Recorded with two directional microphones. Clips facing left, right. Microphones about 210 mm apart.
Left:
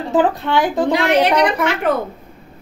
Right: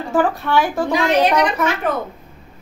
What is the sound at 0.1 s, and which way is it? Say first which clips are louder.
Speech: left 1 dB; 20° left (ahead or behind).